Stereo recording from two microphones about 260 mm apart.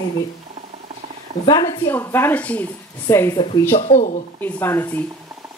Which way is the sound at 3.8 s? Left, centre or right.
Left.